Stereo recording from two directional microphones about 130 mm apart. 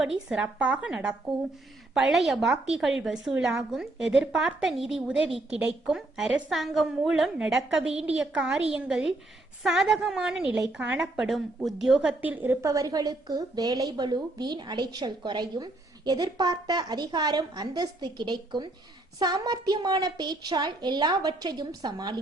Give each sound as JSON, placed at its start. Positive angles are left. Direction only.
{"t": 0.0, "sound": "a woman's voice", "side_deg": -5}